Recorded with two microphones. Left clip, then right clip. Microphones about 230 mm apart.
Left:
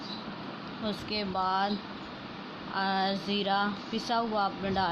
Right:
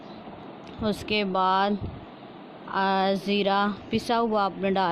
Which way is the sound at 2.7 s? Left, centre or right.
Right.